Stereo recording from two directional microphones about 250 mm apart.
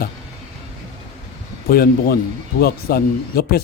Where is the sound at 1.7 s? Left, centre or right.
Left.